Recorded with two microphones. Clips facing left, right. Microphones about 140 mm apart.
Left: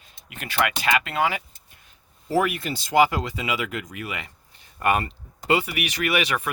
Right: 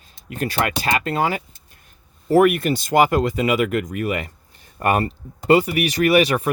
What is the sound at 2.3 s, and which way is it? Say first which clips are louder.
Speech: right 8 dB; 55° right (ahead or behind).